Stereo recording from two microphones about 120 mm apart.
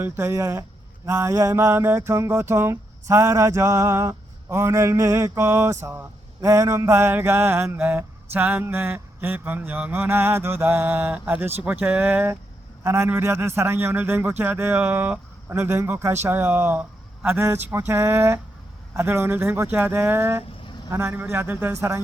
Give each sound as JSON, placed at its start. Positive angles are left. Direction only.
{"t": 0.0, "sound": "mantra", "side_deg": -20}
{"t": 5.8, "sound": "a man's voice", "side_deg": -20}
{"t": 12.8, "sound": "mantra", "side_deg": -20}
{"t": 13.6, "sound": "a man's voice", "side_deg": -20}
{"t": 17.2, "sound": "mantra", "side_deg": -20}